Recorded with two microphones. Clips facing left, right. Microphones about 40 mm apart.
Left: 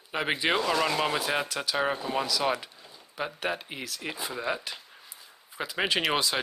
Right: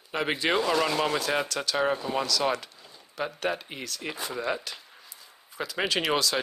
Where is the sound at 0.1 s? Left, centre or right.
Centre.